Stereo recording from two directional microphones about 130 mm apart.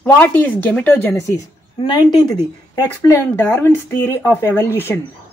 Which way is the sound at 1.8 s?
35° left (ahead or behind).